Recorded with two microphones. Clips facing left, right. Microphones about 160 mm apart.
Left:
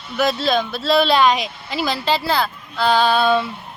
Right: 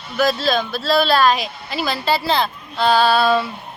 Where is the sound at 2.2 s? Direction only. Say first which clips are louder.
Right 1 dB; 20° right (ahead or behind).